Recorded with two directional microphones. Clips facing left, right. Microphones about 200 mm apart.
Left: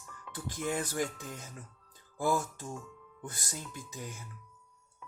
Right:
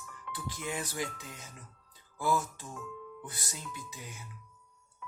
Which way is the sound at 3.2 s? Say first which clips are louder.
Left 2 dB; 50° left (ahead or behind).